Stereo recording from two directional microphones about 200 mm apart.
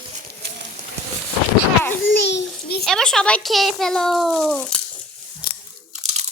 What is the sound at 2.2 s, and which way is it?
Speech, 60° left (ahead or behind).